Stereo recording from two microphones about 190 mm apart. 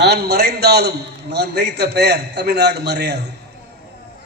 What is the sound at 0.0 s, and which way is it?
A man's voice, 60° right (ahead or behind).